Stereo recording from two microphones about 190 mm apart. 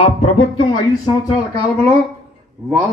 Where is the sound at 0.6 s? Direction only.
25° left (ahead or behind).